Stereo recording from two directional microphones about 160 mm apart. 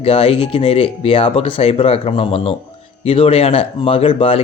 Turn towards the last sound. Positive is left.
turn(degrees=35)  # may be behind; listen again after turning